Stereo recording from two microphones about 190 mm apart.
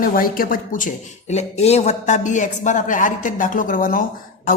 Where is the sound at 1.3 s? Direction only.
35° left (ahead or behind).